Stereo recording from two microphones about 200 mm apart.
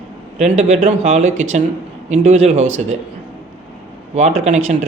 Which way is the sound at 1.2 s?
80° right.